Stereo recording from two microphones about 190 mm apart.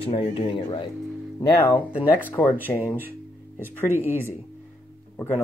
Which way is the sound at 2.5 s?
10° right (ahead or behind).